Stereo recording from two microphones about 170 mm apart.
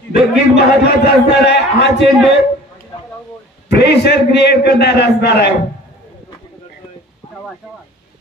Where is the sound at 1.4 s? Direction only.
85° left.